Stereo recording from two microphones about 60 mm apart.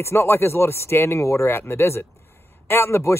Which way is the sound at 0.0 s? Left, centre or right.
Left.